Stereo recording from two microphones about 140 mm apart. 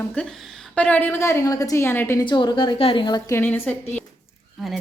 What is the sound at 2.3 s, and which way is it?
Speech, 35° left (ahead or behind).